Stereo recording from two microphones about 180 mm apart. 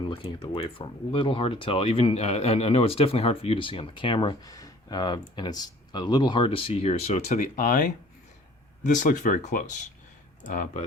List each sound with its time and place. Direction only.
0.1 s speech: 25° left (ahead or behind); by 10.8 s 45° left (ahead or behind)